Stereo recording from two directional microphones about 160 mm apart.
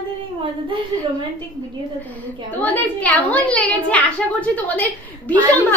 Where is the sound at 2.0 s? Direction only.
10° left (ahead or behind).